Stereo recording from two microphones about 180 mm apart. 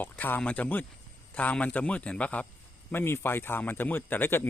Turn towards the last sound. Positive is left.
turn(degrees=10)  # may be behind; listen again after turning